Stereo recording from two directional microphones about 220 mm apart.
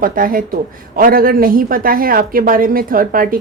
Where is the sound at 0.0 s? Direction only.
40° right (ahead or behind).